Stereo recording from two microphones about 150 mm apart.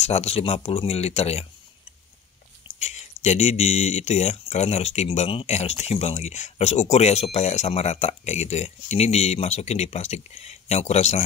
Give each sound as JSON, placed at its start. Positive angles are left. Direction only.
{"t": 0.0, "sound": "speech", "side_deg": 45}
{"t": 2.8, "sound": "speech", "side_deg": 50}